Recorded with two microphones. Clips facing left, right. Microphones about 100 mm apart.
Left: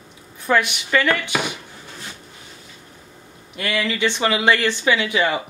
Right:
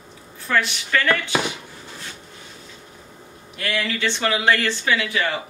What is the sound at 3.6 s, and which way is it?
Speech, 5° left (ahead or behind).